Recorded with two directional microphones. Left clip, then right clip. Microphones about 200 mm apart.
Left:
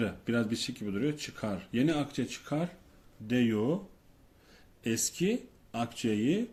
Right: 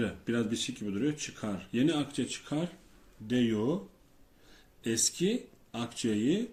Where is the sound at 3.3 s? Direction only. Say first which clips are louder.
Even; 45° left (ahead or behind).